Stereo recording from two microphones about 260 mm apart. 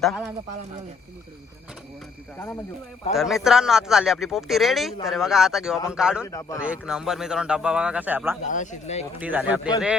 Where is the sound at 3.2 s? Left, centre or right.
Centre.